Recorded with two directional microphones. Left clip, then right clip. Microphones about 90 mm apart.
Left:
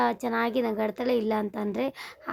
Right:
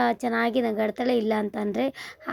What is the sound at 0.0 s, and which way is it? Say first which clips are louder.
A woman's voice: right 2 dB; 25° right (ahead or behind).